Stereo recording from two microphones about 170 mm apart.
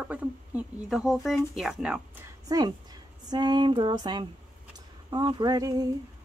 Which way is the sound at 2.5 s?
20° right (ahead or behind).